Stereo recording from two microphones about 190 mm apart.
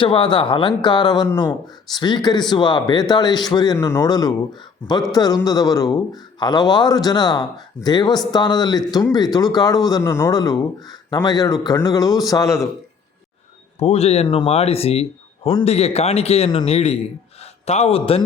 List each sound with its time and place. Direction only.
0.0 s speech: 25° left (ahead or behind)
13.7 s a man's voice: 35° left (ahead or behind)